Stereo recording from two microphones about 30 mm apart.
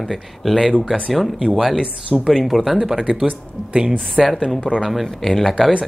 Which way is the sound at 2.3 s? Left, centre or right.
Centre.